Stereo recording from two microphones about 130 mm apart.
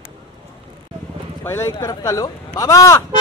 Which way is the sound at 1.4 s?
20° left (ahead or behind).